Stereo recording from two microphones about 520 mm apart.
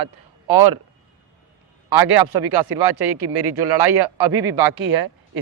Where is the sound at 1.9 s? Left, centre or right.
Right.